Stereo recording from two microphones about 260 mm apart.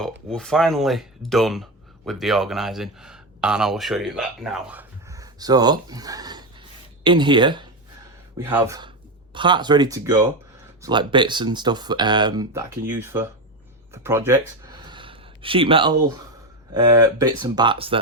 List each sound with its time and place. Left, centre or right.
0.3 s speech: centre
13.9 s a sound: centre
16.9 s speech: centre